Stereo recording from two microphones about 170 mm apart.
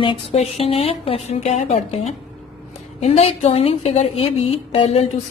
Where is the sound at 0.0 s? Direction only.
30° left (ahead or behind).